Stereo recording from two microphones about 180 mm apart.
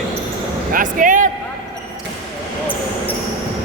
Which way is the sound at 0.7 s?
45° right (ahead or behind).